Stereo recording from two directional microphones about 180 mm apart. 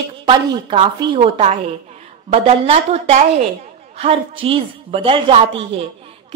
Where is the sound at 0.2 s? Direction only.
25° right (ahead or behind).